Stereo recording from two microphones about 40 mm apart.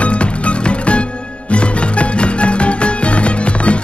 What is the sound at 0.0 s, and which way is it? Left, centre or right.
Music, left.